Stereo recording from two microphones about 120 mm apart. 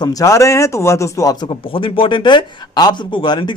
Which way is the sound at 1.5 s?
45° left (ahead or behind).